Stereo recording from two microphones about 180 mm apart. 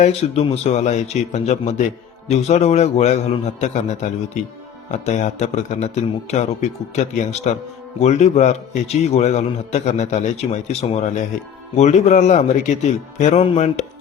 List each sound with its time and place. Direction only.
0.0 s a man's voice: 35° left (ahead or behind)